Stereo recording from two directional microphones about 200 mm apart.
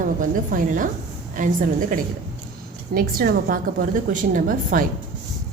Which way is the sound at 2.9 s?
45° right (ahead or behind).